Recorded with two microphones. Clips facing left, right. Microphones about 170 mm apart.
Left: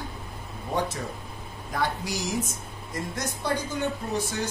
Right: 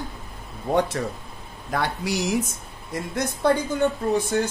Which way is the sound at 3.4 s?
55° right (ahead or behind).